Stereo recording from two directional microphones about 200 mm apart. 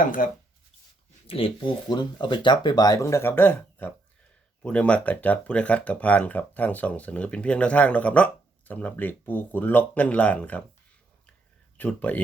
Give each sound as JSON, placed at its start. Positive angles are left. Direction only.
{"t": 0.0, "sound": "speech", "side_deg": 40}
{"t": 1.3, "sound": "speech", "side_deg": 25}
{"t": 11.8, "sound": "speech", "side_deg": 10}